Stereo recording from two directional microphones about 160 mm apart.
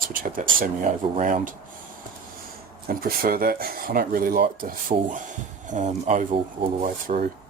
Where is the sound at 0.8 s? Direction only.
45° right (ahead or behind).